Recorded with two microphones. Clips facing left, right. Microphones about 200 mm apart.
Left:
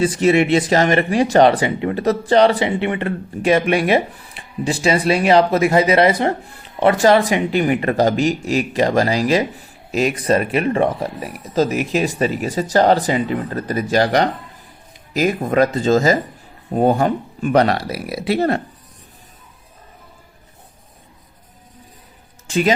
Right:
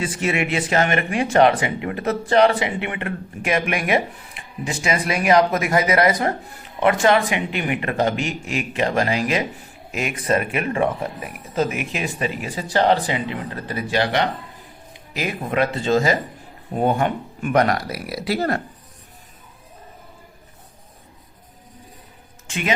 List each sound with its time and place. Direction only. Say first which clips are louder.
0.0 s speech: left 8 dB; 35° left (ahead or behind)
22.4 s a man's voice: left 9 dB; 35° left (ahead or behind)